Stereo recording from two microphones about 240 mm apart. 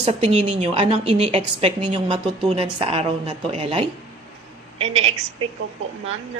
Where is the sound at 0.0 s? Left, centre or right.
Right.